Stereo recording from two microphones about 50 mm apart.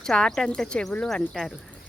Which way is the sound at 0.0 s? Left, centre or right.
Centre.